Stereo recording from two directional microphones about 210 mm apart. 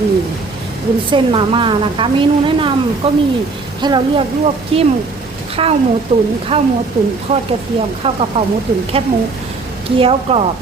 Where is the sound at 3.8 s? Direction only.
20° right (ahead or behind).